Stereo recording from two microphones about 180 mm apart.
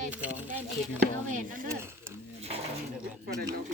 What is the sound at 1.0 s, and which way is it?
Speech, 50° right (ahead or behind).